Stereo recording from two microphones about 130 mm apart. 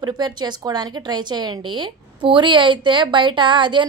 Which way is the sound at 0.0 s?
35° right (ahead or behind).